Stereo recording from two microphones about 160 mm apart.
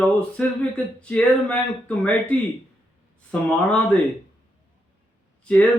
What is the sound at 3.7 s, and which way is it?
Speech, 10° left (ahead or behind).